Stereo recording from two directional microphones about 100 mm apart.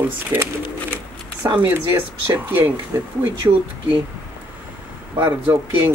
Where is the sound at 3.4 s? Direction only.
30° right (ahead or behind).